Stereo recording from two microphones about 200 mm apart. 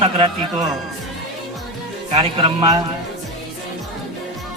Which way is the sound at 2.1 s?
25° right (ahead or behind).